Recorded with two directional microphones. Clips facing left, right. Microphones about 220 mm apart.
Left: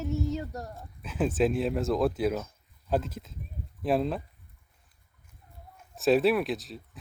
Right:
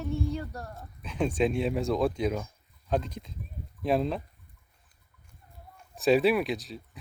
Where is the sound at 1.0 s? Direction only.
5° left (ahead or behind).